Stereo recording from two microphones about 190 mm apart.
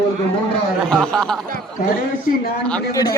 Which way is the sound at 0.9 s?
5° left (ahead or behind).